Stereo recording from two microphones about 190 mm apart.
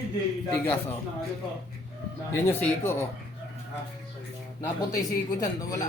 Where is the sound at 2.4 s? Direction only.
15° left (ahead or behind).